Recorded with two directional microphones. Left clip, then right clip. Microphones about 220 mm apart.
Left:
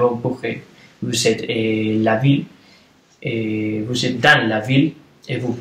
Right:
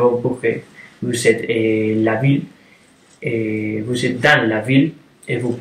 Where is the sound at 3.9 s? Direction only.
15° left (ahead or behind).